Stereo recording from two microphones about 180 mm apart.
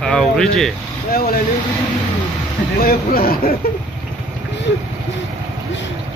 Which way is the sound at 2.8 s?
55° left (ahead or behind).